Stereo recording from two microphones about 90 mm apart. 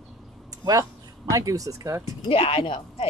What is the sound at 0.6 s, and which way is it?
A woman's voice, 40° right (ahead or behind).